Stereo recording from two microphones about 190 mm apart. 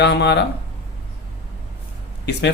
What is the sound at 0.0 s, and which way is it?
Speech, 65° left (ahead or behind).